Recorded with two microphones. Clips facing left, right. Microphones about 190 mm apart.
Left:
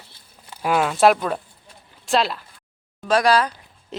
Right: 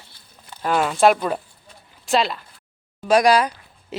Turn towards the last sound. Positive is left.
turn(degrees=-15)  # may be behind; listen again after turning